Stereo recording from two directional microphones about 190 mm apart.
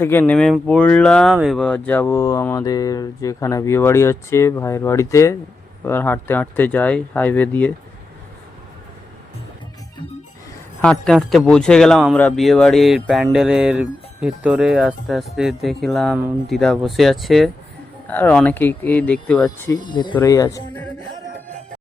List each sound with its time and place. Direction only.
0.0 s speech: 10° left (ahead or behind)
10.8 s a man's voice: 5° left (ahead or behind)
19.5 s speech: 15° left (ahead or behind)